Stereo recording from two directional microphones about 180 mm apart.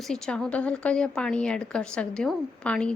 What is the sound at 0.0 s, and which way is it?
A woman's voice, 5° left (ahead or behind).